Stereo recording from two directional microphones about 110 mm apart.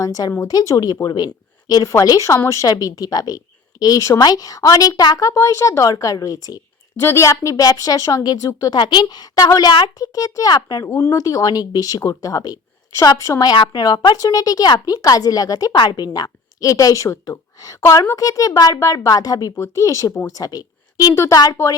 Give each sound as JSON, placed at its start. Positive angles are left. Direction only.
{"t": 0.0, "sound": "a woman's voice", "side_deg": 35}